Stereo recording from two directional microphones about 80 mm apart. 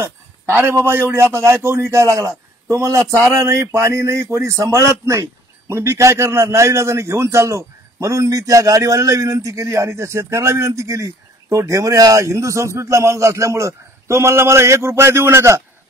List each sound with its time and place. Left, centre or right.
0.0 s a man's voice: right